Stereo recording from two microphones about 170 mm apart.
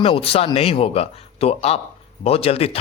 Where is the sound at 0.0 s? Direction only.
35° left (ahead or behind).